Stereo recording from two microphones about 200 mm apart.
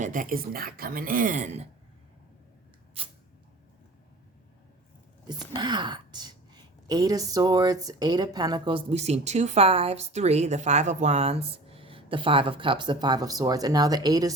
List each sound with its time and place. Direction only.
0.0 s speech: 40° right (ahead or behind)
5.5 s a woman's voice: 20° right (ahead or behind)